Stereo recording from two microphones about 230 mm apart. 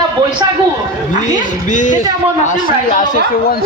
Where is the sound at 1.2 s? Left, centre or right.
Left.